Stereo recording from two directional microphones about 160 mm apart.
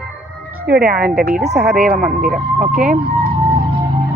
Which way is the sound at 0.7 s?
75° right (ahead or behind).